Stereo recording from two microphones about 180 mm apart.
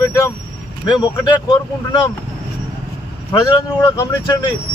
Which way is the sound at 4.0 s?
25° left (ahead or behind).